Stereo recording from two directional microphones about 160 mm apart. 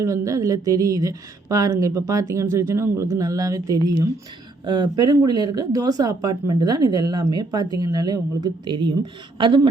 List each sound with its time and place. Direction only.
0.0 s speech: 20° right (ahead or behind)